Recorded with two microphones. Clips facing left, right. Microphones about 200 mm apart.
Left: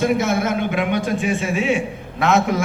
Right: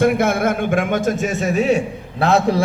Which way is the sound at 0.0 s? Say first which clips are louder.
Right 3 dB; 55° right (ahead or behind).